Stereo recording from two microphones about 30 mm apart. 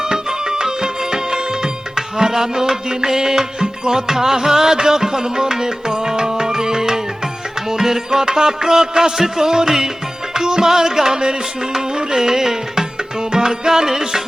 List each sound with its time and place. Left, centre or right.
0.0 s music: right